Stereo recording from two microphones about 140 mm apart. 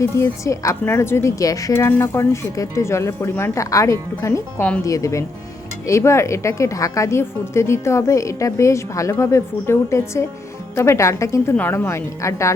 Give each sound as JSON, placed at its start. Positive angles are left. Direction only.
{"t": 0.0, "sound": "speech", "side_deg": 20}